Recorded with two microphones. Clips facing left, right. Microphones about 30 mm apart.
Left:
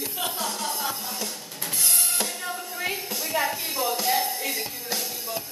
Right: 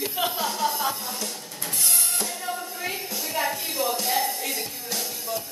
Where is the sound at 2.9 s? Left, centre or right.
Centre.